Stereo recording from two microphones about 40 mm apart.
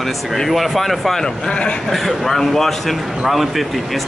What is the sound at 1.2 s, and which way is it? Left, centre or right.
Speech, left.